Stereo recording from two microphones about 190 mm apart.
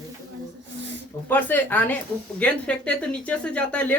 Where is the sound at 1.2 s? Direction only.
10° left (ahead or behind).